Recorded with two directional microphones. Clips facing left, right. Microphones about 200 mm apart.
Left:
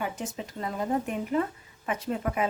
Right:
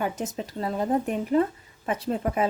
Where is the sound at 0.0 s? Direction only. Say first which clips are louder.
Right 4 dB; 40° right (ahead or behind).